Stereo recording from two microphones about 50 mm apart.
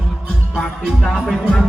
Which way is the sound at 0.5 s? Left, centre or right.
Centre.